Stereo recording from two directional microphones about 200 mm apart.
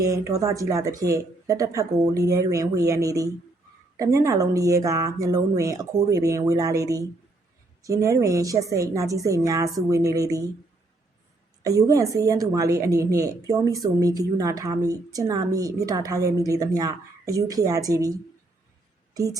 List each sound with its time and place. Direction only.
0.0 s a woman's voice: 15° right (ahead or behind)
11.6 s a woman's voice: 15° right (ahead or behind)
19.1 s speech: 15° right (ahead or behind)